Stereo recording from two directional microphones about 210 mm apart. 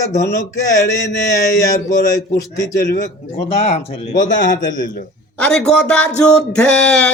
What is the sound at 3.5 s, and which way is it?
Speech, 30° left (ahead or behind).